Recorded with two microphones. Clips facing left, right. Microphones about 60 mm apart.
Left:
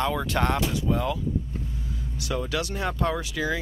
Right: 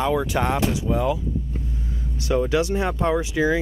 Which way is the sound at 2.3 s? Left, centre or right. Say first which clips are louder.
Right 8 dB; right.